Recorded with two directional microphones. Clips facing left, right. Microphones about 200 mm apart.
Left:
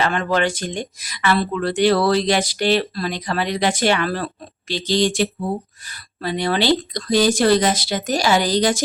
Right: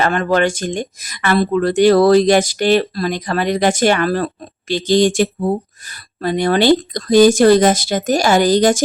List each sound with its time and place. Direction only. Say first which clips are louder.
0.0 s speech: right 4 dB; 45° right (ahead or behind)